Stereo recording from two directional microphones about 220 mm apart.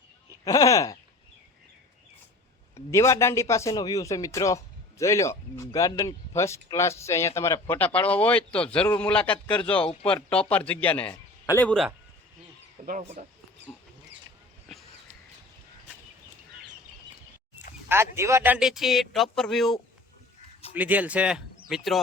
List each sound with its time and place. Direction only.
0.4 s speech: 15° left (ahead or behind)
2.7 s a man's voice: 15° left (ahead or behind)
12.8 s speech: 40° right (ahead or behind)
17.8 s a man's voice: 10° right (ahead or behind)